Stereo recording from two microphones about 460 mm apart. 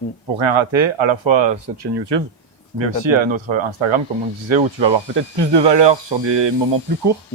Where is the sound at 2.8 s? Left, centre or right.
Right.